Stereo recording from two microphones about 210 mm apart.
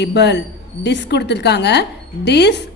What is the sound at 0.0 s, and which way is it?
A woman's voice, 55° left (ahead or behind).